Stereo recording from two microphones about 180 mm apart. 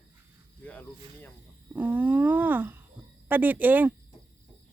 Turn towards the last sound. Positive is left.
turn(degrees=-10)  # may be behind; listen again after turning